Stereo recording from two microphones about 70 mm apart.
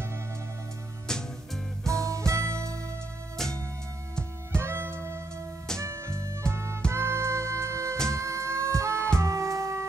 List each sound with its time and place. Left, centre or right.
1.0 s music: centre
1.9 s music: right
4.6 s music: right